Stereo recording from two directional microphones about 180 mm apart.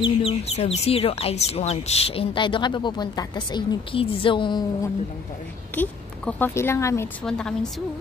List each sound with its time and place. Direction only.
0.0 s speech: 35° left (ahead or behind)
5.8 s speech: 10° left (ahead or behind)
7.2 s a woman's voice: 5° left (ahead or behind)